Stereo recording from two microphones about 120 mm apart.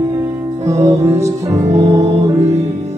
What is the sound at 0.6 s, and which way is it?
Music, 25° right (ahead or behind).